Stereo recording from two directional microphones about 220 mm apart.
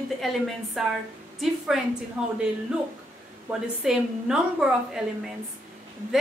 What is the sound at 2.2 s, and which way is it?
Speech, 5° right (ahead or behind).